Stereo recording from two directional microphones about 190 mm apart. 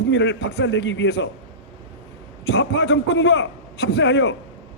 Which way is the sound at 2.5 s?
65° left (ahead or behind).